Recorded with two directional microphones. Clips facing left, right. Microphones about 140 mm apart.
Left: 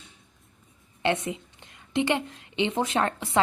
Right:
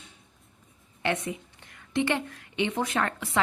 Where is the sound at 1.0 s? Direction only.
25° left (ahead or behind).